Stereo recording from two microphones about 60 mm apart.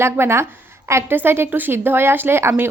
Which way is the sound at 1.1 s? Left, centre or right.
Right.